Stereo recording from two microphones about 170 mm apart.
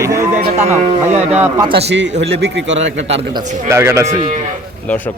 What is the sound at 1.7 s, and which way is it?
Speech, 85° right.